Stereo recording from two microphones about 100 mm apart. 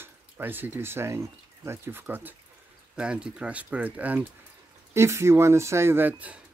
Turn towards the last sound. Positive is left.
turn(degrees=-15)  # may be behind; listen again after turning